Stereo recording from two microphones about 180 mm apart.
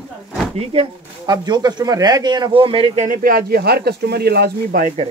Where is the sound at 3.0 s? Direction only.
50° right (ahead or behind).